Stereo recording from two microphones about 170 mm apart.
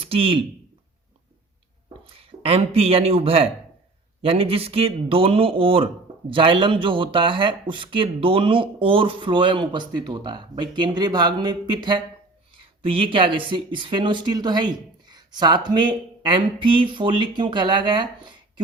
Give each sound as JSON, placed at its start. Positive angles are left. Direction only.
{"t": 0.0, "sound": "speech", "side_deg": -35}
{"t": 2.1, "sound": "speech", "side_deg": -35}